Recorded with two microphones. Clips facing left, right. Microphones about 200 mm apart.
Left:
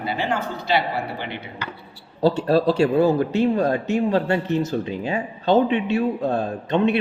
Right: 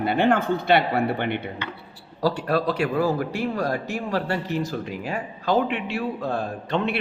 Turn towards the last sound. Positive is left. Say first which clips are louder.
# left 5 dB
turn(degrees=20)  # may be behind; listen again after turning